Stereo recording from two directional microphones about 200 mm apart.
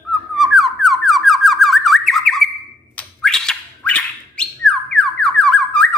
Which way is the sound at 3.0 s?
5° left (ahead or behind).